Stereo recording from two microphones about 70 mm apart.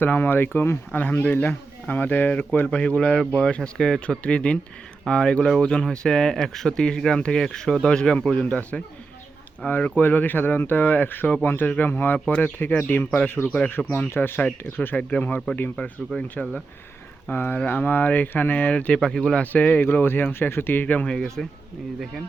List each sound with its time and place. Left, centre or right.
0.0 s speech: left
15.7 s speech: centre
17.3 s speech: left
18.9 s speech: centre
19.8 s speech: left; by 21.4 s centre